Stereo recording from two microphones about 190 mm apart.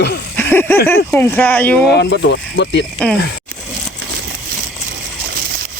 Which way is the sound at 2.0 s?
65° left (ahead or behind).